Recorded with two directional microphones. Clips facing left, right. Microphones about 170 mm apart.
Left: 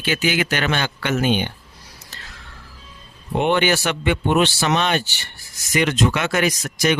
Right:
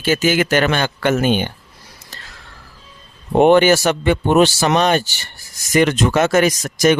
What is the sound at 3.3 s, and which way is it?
Speech, 45° right (ahead or behind).